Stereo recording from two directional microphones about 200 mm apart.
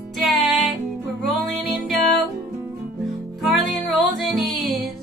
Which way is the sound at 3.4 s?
Centre (ahead or behind).